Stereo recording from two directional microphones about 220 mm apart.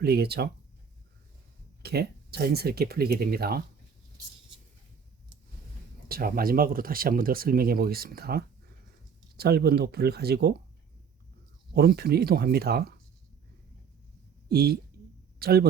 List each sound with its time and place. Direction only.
0.0 s speech: 45° right (ahead or behind)
1.8 s speech: 45° right (ahead or behind)
6.1 s speech: 40° right (ahead or behind)
11.7 s speech: 45° right (ahead or behind)
14.5 s speech: 45° right (ahead or behind)